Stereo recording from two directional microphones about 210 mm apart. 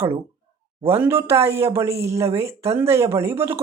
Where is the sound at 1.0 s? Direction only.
10° right (ahead or behind).